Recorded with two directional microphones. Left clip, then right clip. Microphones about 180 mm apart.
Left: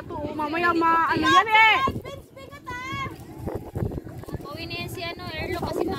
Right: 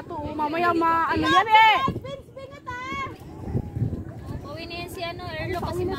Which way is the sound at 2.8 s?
60° left (ahead or behind).